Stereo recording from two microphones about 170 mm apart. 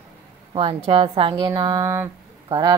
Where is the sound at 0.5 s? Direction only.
30° right (ahead or behind).